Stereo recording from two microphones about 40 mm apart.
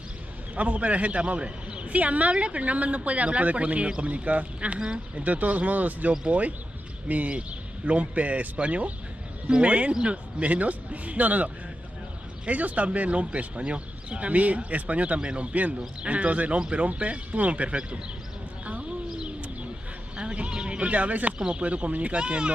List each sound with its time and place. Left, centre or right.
0.6 s speech: right
4.7 s speech: right
5.2 s speech: right
15.1 s speech: right
18.7 s a sound: right
20.2 s speech: right